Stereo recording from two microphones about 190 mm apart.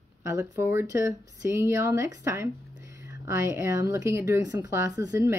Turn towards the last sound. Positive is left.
turn(degrees=-15)  # may be behind; listen again after turning